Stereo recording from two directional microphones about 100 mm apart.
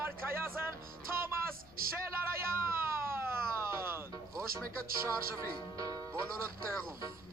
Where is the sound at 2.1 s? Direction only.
25° right (ahead or behind).